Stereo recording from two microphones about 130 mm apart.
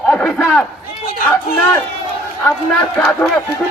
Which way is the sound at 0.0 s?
5° left (ahead or behind).